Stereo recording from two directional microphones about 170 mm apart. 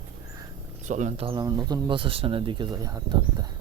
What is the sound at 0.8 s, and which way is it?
Speech, 45° right (ahead or behind).